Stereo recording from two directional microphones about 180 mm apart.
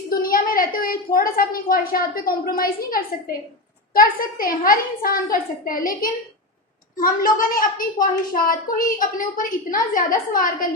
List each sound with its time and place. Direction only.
0.1 s a woman's voice: 50° left (ahead or behind)